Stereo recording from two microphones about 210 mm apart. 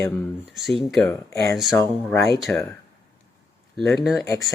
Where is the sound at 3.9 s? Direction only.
Centre (ahead or behind).